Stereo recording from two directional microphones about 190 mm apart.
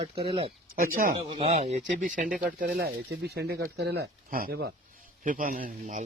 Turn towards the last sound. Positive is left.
turn(degrees=-45)  # may be behind; listen again after turning